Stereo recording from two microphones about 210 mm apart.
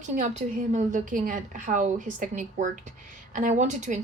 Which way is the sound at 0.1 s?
35° right (ahead or behind).